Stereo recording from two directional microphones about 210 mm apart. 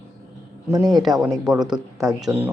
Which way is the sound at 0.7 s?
20° right (ahead or behind).